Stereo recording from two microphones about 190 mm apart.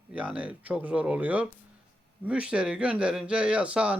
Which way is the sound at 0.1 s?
5° right (ahead or behind).